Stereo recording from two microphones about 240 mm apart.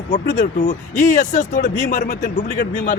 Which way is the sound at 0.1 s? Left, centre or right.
Left.